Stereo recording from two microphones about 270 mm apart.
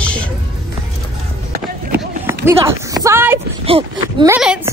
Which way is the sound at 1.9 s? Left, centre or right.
Centre.